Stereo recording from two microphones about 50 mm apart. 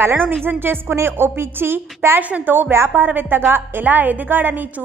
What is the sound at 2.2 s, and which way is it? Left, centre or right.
A woman's voice, right.